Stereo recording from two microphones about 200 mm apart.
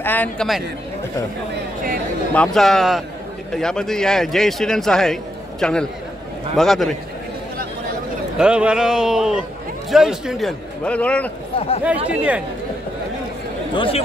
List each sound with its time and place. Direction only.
0.0 s a man's voice: 10° left (ahead or behind)
2.3 s a man's voice: 5° left (ahead or behind)
8.4 s a man's voice: 5° right (ahead or behind)
11.5 s speech: 30° left (ahead or behind)
12.1 s speech: 5° right (ahead or behind)
13.7 s speech: 25° left (ahead or behind)